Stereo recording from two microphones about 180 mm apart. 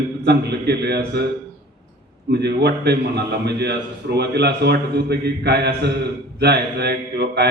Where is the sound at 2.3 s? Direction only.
65° right (ahead or behind).